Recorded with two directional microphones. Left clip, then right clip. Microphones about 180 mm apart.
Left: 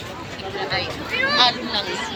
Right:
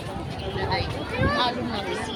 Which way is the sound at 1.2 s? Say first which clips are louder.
Left 7 dB; 50° right (ahead or behind).